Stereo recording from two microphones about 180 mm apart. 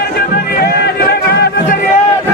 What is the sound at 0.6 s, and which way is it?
Music, 60° left (ahead or behind).